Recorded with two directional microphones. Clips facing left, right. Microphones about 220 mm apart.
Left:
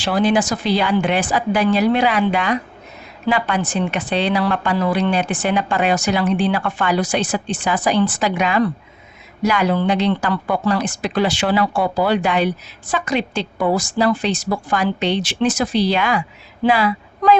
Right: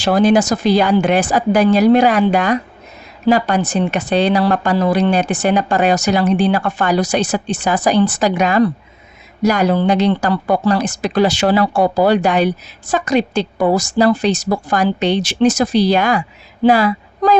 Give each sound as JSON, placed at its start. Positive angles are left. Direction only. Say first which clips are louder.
{"t": 0.0, "sound": "speech", "louder": "right 5 dB", "side_deg": -45}